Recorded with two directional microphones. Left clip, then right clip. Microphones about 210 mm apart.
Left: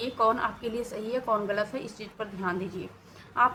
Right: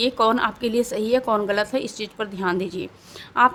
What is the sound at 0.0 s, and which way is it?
A woman's voice, 50° right (ahead or behind).